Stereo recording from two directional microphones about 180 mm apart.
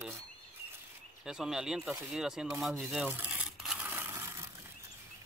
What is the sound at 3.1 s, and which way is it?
Crumpling, 5° right (ahead or behind).